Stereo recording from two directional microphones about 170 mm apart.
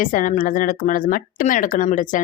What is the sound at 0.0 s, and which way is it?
Speech, 50° left (ahead or behind).